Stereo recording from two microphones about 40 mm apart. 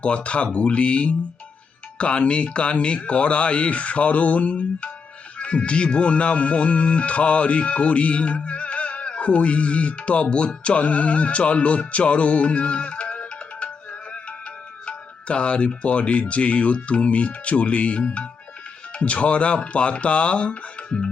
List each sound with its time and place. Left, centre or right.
0.0 s speech: left
14.8 s speech: left